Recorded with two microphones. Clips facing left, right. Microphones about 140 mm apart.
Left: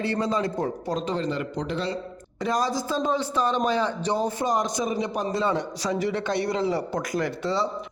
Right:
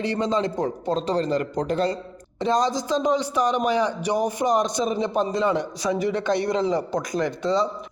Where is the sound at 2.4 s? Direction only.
25° right (ahead or behind).